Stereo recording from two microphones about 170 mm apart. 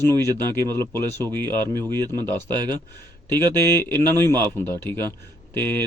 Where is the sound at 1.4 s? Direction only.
25° right (ahead or behind).